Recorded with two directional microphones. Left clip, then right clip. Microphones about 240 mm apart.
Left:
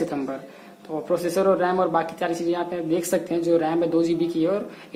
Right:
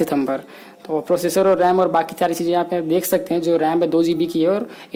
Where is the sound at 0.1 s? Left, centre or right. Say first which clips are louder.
Right 8 dB; right.